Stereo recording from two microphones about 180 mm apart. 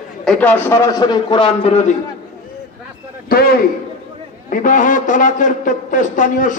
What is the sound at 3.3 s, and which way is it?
A man's voice, 55° left (ahead or behind).